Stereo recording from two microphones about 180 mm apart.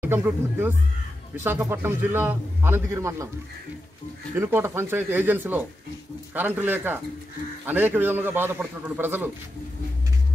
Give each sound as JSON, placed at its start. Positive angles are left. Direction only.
{"t": 0.0, "sound": "a man's voice", "side_deg": -10}
{"t": 4.4, "sound": "a man's voice", "side_deg": -15}